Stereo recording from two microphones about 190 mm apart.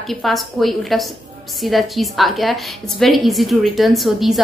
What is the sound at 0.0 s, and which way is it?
A woman's voice, centre (ahead or behind).